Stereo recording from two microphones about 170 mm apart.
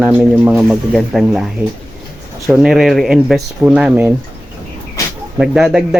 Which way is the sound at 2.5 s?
5° right (ahead or behind).